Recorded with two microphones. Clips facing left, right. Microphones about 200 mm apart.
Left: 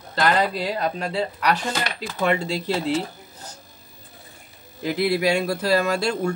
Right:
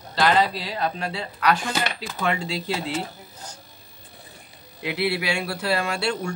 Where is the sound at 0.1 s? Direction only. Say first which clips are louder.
Even; 50° left (ahead or behind).